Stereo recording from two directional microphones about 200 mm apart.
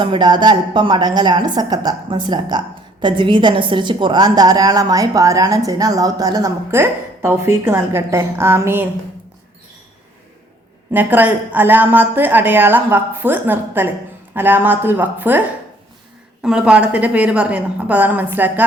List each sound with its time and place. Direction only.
0.0 s a woman's voice: 25° right (ahead or behind)
10.9 s a woman's voice: 10° right (ahead or behind)